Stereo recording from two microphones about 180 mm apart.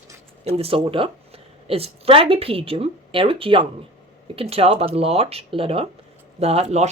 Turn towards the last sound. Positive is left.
turn(degrees=-35)  # may be behind; listen again after turning